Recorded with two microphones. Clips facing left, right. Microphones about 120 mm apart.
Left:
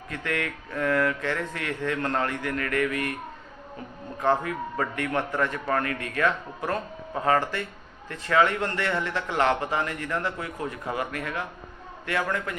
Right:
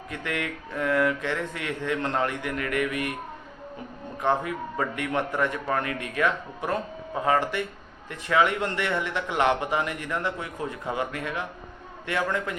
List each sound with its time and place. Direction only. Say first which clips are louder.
0.1 s a man's voice: left 1 dB; 20° right (ahead or behind)
4.2 s a man's voice: left 1 dB; 20° right (ahead or behind)